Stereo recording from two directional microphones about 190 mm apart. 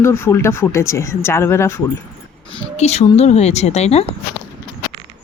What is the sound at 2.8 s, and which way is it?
A woman's voice, 35° left (ahead or behind).